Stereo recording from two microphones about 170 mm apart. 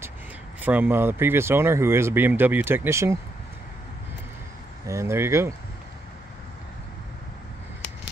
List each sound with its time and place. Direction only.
0.6 s speech: 10° right (ahead or behind)
4.8 s speech: 15° right (ahead or behind)